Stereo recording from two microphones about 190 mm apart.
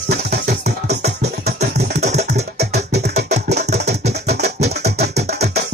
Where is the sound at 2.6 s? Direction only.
60° right (ahead or behind).